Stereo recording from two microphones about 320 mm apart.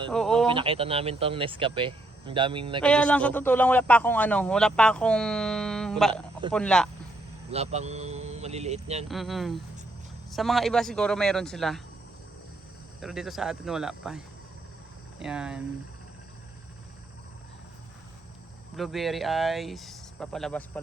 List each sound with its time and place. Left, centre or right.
0.1 s a man's voice: centre
0.4 s speech: centre
2.8 s a man's voice: centre
7.5 s speech: centre
9.0 s a man's voice: centre
13.0 s a man's voice: centre
15.2 s a man's voice: centre
18.8 s a man's voice: centre